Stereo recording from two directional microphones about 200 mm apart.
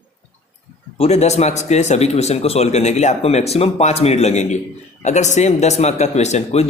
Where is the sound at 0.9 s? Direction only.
30° left (ahead or behind).